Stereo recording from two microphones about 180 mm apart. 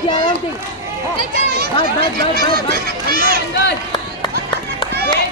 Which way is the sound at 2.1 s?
55° right (ahead or behind).